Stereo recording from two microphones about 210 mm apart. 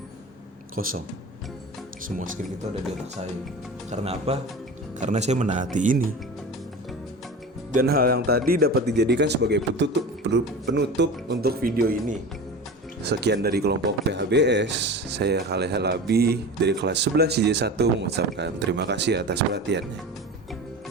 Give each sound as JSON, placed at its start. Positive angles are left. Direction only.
{"t": 0.8, "sound": "speech", "side_deg": -40}
{"t": 2.0, "sound": "speech", "side_deg": -40}
{"t": 3.8, "sound": "speech", "side_deg": -30}
{"t": 7.7, "sound": "speech", "side_deg": -45}
{"t": 13.0, "sound": "speech", "side_deg": -50}